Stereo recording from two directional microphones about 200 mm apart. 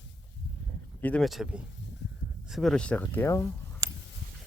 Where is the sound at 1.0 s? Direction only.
5° left (ahead or behind).